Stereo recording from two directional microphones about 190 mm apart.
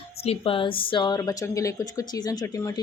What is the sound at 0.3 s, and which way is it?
A woman's voice, 30° left (ahead or behind).